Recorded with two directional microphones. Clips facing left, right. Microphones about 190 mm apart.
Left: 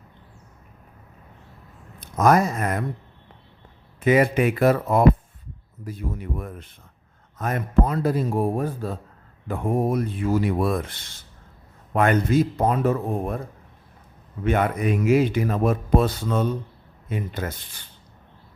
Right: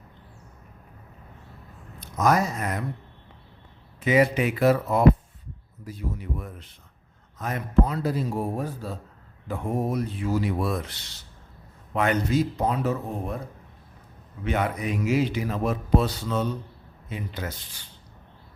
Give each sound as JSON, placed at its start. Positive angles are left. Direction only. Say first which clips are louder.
{"t": 2.0, "sound": "speech", "louder": "left 4 dB", "side_deg": 55}
{"t": 4.0, "sound": "speech", "louder": "left 3 dB", "side_deg": 50}
{"t": 14.4, "sound": "speech", "louder": "left 5 dB", "side_deg": 50}